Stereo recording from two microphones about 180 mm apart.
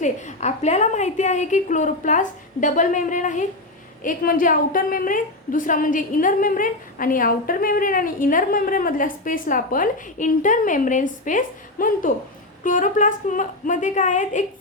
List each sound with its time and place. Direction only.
0.0 s a woman's voice: 40° left (ahead or behind)